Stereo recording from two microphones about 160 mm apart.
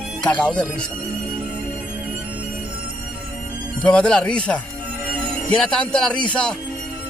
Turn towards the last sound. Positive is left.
turn(degrees=5)  # may be behind; listen again after turning